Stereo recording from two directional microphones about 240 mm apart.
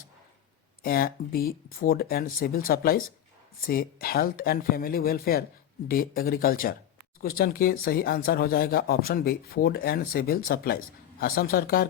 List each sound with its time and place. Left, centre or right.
0.8 s speech: left